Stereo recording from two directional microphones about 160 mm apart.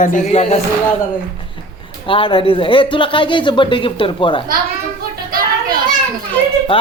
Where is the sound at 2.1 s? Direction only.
35° left (ahead or behind).